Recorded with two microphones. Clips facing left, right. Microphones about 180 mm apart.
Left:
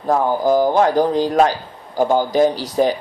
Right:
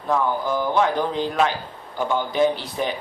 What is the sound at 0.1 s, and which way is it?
Speech, 40° left (ahead or behind).